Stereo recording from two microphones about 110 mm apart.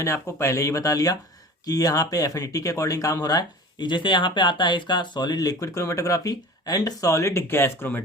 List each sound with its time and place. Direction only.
0.0 s speech: 25° left (ahead or behind)